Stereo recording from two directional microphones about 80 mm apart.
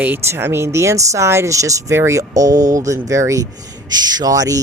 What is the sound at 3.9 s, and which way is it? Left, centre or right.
Speech, right.